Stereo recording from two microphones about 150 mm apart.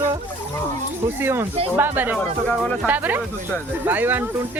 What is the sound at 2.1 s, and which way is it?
Speech, 10° left (ahead or behind).